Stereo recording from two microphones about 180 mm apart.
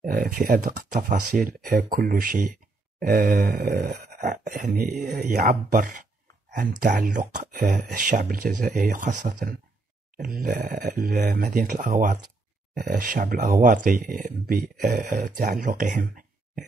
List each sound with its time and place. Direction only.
0.0 s speech: 50° right (ahead or behind)
4.9 s speech: centre (ahead or behind)
5.2 s speech: 50° right (ahead or behind)